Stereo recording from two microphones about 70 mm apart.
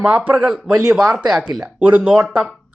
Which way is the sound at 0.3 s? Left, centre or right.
Centre.